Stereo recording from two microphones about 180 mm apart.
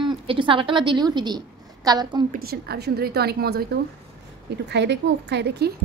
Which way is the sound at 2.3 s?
60° right (ahead or behind).